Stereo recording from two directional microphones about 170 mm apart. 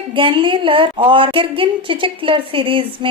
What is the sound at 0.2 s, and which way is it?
A woman's voice, 30° right (ahead or behind).